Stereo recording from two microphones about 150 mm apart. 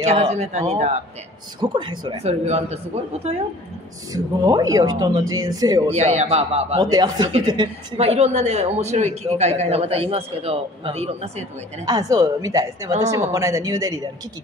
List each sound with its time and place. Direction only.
0.0 s a man's voice: 50° right (ahead or behind)
1.6 s speech: 30° right (ahead or behind)
2.2 s a man's voice: 45° right (ahead or behind)
4.1 s speech: 25° right (ahead or behind)
5.9 s a man's voice: 45° right (ahead or behind)
6.8 s speech: 30° right (ahead or behind)
8.0 s a man's voice: 45° right (ahead or behind)
11.8 s speech: 25° right (ahead or behind)